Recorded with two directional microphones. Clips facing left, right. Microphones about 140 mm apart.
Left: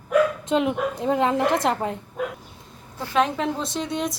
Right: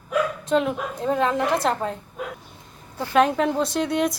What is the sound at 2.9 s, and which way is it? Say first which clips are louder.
A woman's voice: right 3 dB; centre (ahead or behind).